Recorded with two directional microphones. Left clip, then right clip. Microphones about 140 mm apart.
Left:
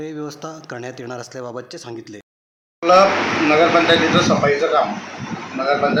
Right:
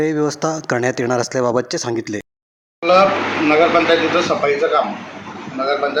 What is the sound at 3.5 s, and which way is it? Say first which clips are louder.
Speech: right 1 dB; 5° right (ahead or behind).